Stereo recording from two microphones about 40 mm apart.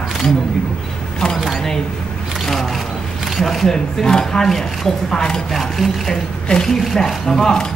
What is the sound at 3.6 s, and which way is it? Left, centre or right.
Speech, centre.